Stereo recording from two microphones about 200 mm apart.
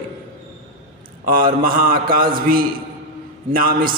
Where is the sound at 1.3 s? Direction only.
45° right (ahead or behind).